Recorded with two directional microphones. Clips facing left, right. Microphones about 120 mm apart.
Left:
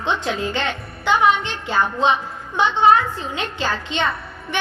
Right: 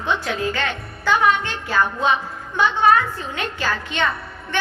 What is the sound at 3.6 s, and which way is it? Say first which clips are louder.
Speech: left 1 dB; 25° left (ahead or behind).